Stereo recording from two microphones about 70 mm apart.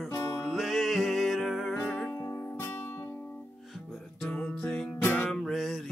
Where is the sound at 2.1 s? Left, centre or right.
Left.